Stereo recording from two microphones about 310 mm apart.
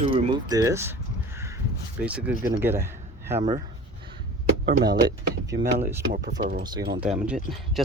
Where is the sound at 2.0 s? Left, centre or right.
Centre.